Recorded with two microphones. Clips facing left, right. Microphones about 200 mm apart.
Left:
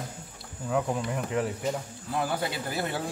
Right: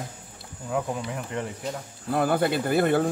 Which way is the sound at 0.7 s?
Centre (ahead or behind).